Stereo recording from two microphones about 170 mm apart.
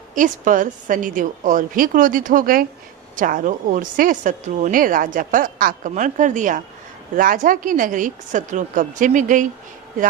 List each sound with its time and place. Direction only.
0.1 s a woman's voice: 50° right (ahead or behind)